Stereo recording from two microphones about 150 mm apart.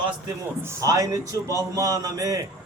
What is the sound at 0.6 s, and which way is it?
A man's voice, 20° right (ahead or behind).